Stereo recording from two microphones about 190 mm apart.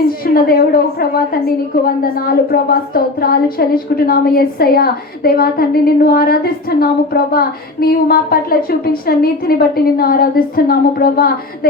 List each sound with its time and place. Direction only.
0.3 s a woman's voice: 50° left (ahead or behind)